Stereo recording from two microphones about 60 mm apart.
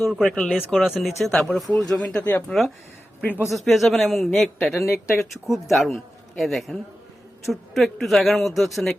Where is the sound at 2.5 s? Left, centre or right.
Centre.